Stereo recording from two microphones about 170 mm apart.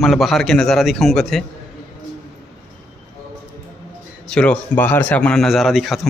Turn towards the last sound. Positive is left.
turn(degrees=0)  # may be behind; listen again after turning